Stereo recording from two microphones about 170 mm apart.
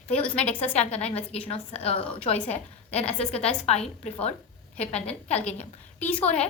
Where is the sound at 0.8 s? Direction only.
40° left (ahead or behind).